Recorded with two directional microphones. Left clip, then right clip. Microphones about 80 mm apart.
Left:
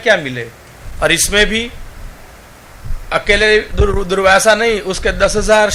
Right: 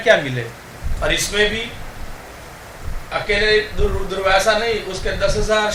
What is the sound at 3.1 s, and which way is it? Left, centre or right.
A man's voice, left.